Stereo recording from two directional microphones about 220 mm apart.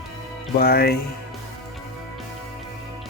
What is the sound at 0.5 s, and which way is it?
Speech, 45° left (ahead or behind).